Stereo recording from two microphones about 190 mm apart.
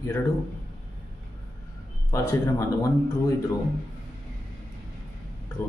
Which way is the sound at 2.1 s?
15° left (ahead or behind).